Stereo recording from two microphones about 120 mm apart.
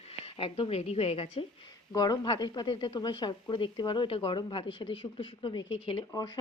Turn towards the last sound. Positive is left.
turn(degrees=35)  # may be behind; listen again after turning